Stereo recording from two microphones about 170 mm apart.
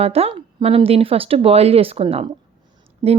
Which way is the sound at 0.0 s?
35° right (ahead or behind).